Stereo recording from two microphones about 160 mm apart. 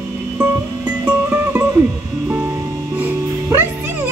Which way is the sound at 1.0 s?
15° right (ahead or behind).